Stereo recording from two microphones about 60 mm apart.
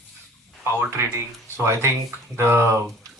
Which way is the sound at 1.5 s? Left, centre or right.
Right.